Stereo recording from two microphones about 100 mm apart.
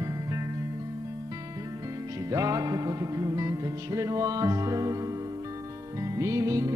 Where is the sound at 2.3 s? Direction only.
35° right (ahead or behind).